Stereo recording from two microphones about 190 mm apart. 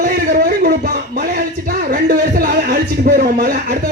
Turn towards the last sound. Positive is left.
turn(degrees=-55)  # may be behind; listen again after turning